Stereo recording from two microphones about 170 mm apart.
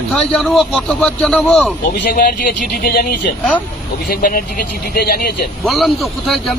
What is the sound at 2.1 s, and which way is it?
Speech, 55° left (ahead or behind).